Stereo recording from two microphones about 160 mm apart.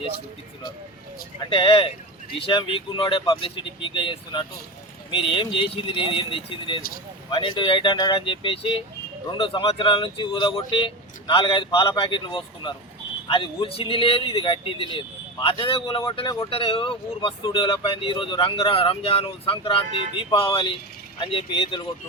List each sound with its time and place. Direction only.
1.5 s speech: 30° left (ahead or behind)